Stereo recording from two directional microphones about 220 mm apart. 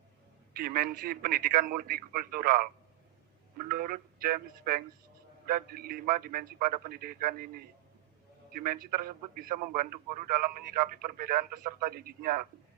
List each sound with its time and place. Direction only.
0.5 s a man's voice: 40° right (ahead or behind)
3.7 s a man's voice: 40° right (ahead or behind)